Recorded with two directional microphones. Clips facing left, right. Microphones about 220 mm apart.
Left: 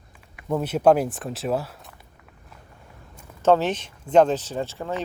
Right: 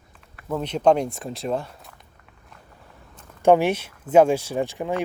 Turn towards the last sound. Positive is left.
turn(degrees=-15)  # may be behind; listen again after turning